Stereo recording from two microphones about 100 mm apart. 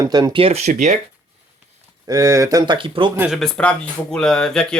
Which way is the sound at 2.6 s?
60° right (ahead or behind).